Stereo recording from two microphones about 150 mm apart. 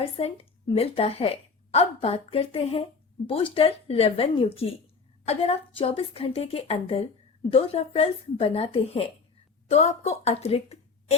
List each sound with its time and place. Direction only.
0.0 s a woman's voice: 40° left (ahead or behind)